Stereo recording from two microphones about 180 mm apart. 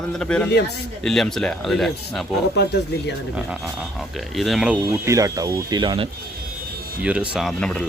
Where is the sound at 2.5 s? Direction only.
65° left (ahead or behind).